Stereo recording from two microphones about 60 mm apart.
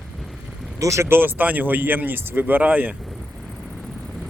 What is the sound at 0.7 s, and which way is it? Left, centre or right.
Speech, right.